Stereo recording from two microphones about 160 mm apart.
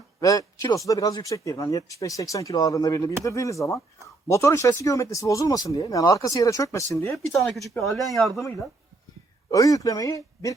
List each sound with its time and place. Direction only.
0.2 s speech: 20° left (ahead or behind)
7.1 s speech: centre (ahead or behind)
9.5 s speech: 20° left (ahead or behind)